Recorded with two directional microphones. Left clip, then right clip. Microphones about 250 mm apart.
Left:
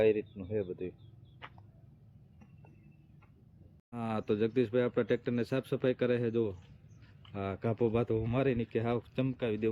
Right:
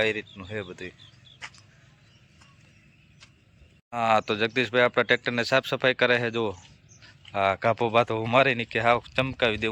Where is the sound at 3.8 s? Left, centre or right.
Right.